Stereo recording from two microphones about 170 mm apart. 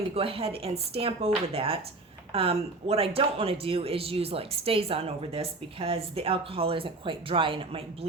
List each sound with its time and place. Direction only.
0.1 s speech: 35° right (ahead or behind)